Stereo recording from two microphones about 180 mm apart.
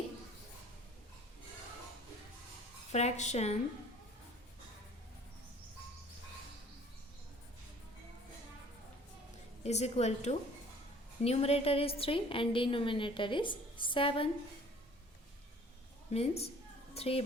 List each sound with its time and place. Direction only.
2.9 s a woman's voice: 40° left (ahead or behind)
9.6 s a woman's voice: 35° left (ahead or behind)
16.1 s a woman's voice: 35° left (ahead or behind)